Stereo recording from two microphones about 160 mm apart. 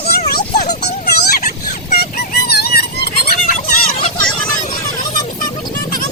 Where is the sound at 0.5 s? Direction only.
50° left (ahead or behind).